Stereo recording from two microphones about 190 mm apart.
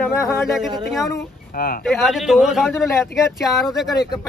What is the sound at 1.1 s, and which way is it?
Speech, 50° left (ahead or behind).